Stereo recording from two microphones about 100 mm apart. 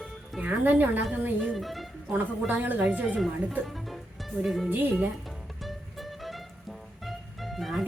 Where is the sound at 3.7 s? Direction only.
Centre (ahead or behind).